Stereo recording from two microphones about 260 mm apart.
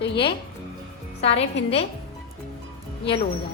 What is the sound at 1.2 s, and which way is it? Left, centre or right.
Speech, left.